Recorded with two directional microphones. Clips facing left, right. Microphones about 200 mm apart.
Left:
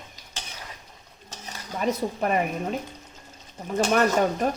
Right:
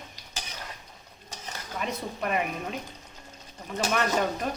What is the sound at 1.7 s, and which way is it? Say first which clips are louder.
Speech: left 7 dB; 40° left (ahead or behind).